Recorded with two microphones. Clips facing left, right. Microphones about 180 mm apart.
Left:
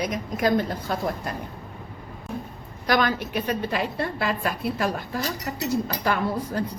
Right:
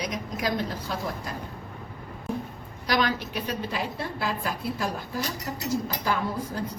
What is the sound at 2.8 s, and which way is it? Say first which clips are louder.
A woman's voice: left 3 dB; 50° left (ahead or behind).